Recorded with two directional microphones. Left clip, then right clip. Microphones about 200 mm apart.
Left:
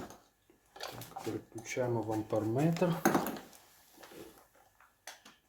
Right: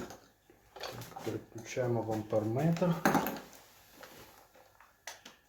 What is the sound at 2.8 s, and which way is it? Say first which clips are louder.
Dishes: even; 45° left (ahead or behind).